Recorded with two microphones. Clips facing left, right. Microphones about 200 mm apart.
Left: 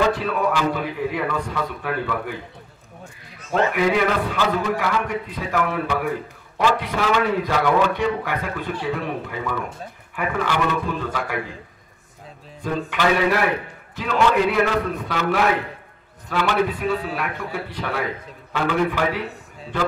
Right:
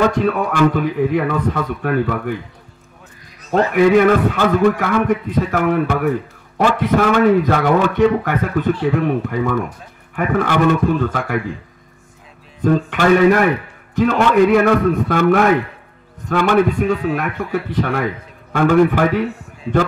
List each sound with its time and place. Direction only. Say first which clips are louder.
0.1 s a man's voice: right 4 dB; 50° right (ahead or behind)
3.7 s a man's voice: right 12 dB; 50° right (ahead or behind)
12.6 s a man's voice: right 7 dB; 50° right (ahead or behind)
16.9 s speech: right 6 dB; 40° left (ahead or behind)
17.7 s a man's voice: right 6 dB; 50° right (ahead or behind)